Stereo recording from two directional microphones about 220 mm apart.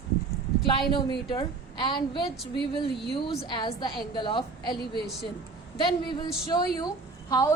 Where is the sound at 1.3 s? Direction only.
20° left (ahead or behind).